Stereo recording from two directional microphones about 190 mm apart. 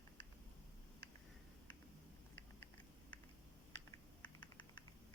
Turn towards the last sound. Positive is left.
turn(degrees=25)  # may be behind; listen again after turning